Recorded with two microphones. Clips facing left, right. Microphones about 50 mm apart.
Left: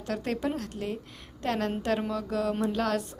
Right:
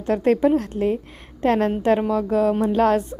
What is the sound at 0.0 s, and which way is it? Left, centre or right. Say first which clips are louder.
A woman's voice: right 12 dB; right.